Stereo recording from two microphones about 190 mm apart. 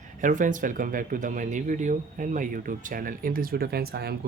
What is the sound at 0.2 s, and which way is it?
Speech, 45° right (ahead or behind).